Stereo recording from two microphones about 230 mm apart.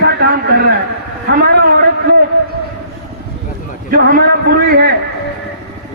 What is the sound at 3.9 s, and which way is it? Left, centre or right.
A man's voice, right.